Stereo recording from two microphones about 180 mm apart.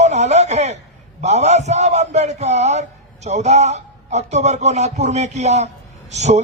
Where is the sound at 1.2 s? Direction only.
40° right (ahead or behind).